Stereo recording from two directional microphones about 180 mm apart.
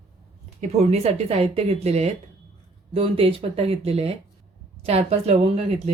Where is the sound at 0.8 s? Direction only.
35° right (ahead or behind).